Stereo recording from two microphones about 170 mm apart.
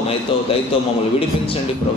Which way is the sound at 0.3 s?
30° left (ahead or behind).